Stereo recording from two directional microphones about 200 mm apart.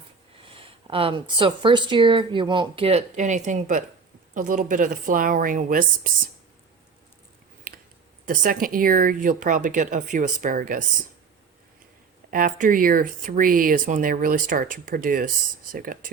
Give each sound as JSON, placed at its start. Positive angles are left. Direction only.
{"t": 0.5, "sound": "speech", "side_deg": -25}
{"t": 7.7, "sound": "a sound", "side_deg": -45}
{"t": 8.2, "sound": "speech", "side_deg": -45}
{"t": 12.3, "sound": "speech", "side_deg": -45}